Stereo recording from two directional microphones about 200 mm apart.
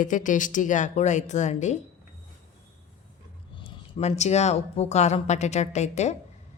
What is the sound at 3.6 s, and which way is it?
Speech, 35° left (ahead or behind).